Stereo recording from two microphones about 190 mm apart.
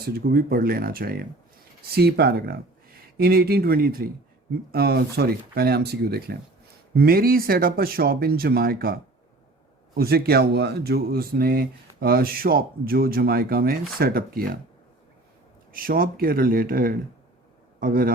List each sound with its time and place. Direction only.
0.0 s speech: 55° right (ahead or behind)
10.0 s speech: 55° right (ahead or behind)
15.7 s a man's voice: 50° right (ahead or behind)